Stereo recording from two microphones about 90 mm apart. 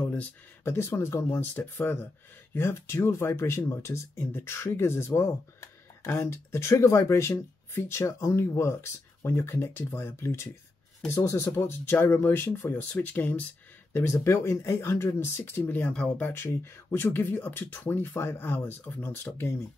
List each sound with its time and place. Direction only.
0.0 s a sound: 15° left (ahead or behind)
0.7 s speech: 30° left (ahead or behind)
16.3 s speech: 25° left (ahead or behind)